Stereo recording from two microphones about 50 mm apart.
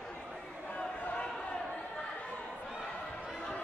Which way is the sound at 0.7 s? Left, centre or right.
Left.